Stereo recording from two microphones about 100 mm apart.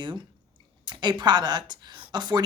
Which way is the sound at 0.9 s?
50° right (ahead or behind).